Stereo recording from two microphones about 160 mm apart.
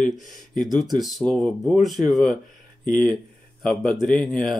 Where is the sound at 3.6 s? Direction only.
5° left (ahead or behind).